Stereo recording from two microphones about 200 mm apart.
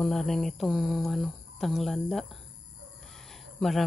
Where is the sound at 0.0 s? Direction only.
Centre (ahead or behind).